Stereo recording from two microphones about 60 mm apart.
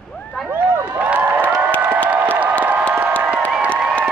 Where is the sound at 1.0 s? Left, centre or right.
Right.